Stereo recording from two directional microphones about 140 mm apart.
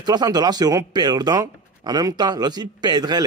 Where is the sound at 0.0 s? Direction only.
30° right (ahead or behind).